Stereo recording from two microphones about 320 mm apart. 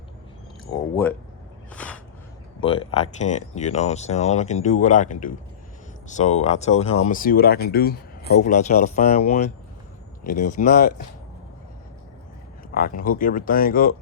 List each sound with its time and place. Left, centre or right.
0.7 s speech: centre
1.7 s a sound: centre
2.6 s speech: centre
12.7 s speech: left